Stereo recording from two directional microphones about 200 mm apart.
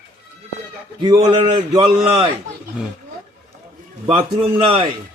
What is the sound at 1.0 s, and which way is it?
A man's voice, 25° right (ahead or behind).